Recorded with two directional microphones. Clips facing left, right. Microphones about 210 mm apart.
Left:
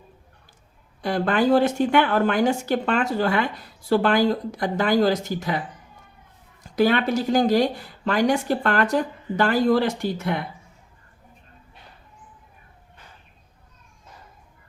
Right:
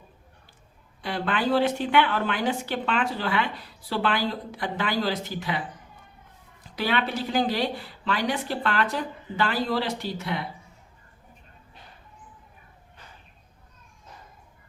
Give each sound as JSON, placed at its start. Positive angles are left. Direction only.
{"t": 1.0, "sound": "speech", "side_deg": 45}